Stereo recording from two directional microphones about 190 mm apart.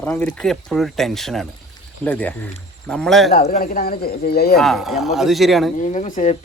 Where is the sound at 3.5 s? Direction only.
50° left (ahead or behind).